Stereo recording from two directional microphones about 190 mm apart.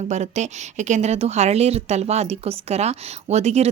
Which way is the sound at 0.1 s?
35° right (ahead or behind).